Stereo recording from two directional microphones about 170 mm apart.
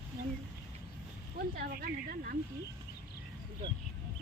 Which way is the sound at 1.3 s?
65° right (ahead or behind).